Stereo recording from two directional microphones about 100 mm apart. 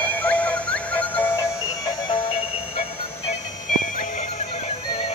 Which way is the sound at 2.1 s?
65° left (ahead or behind).